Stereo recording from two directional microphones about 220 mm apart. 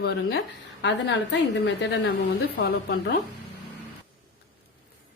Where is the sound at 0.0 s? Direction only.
50° left (ahead or behind).